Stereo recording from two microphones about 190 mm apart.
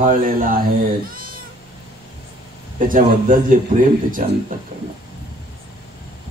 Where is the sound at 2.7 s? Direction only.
45° right (ahead or behind).